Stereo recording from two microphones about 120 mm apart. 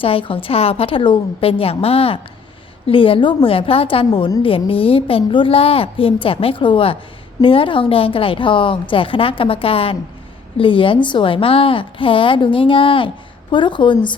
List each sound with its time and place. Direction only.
0.0 s a woman's voice: 50° left (ahead or behind)